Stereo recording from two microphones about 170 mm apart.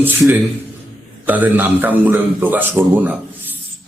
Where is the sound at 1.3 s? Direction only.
10° right (ahead or behind).